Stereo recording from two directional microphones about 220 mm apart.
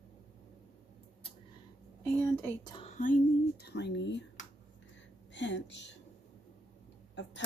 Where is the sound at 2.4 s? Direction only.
15° left (ahead or behind).